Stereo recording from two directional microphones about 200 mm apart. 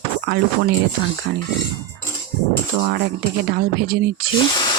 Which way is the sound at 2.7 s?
55° right (ahead or behind).